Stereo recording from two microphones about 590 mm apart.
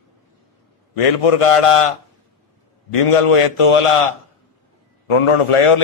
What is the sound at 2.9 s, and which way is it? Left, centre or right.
A man's voice, left.